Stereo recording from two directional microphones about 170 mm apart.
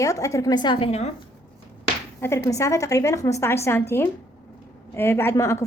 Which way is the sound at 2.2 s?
15° left (ahead or behind).